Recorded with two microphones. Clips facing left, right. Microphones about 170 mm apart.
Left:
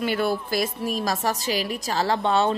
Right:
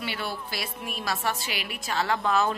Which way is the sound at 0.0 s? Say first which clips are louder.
Left 9 dB; 45° left (ahead or behind).